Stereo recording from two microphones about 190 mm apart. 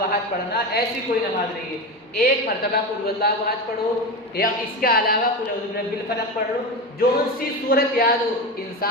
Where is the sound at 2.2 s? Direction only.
55° left (ahead or behind).